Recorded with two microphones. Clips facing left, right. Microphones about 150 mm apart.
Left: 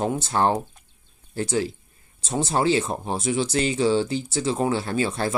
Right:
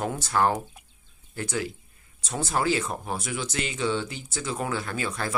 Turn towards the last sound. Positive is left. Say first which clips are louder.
# left 6 dB
turn(degrees=30)  # may be behind; listen again after turning